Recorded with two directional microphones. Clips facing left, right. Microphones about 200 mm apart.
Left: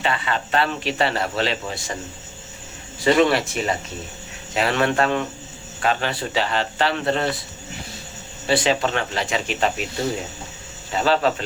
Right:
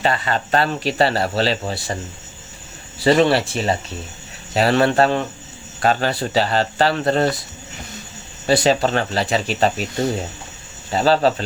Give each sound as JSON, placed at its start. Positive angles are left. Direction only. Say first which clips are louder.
{"t": 0.0, "sound": "speech", "louder": "right 3 dB", "side_deg": -40}
{"t": 3.0, "sound": "speech", "louder": "right 2 dB", "side_deg": -35}
{"t": 8.4, "sound": "speech", "louder": "right 4 dB", "side_deg": -40}
{"t": 10.9, "sound": "speech", "louder": "right 3 dB", "side_deg": -35}